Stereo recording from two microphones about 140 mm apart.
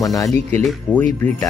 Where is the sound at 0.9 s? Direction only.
10° left (ahead or behind).